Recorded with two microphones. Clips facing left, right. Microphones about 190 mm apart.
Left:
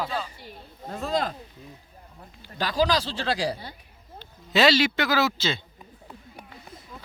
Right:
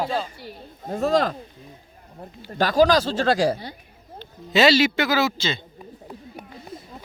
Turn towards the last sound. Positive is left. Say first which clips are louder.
# right 2 dB
turn(degrees=5)  # may be behind; listen again after turning